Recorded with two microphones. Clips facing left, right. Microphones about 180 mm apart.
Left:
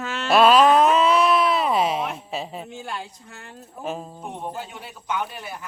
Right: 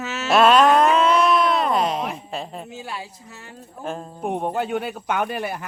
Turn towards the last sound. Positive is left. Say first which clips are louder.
# right 5 dB
turn(degrees=-65)  # may be behind; listen again after turning